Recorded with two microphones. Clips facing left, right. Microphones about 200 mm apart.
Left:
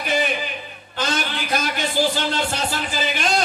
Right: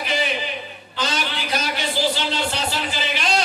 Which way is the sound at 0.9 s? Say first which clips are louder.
Left 1 dB; 50° left (ahead or behind).